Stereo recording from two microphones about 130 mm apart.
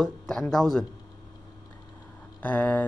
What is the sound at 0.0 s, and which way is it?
Speech, centre (ahead or behind).